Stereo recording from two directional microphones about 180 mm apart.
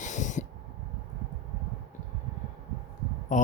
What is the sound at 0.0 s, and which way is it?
Owl, 45° left (ahead or behind).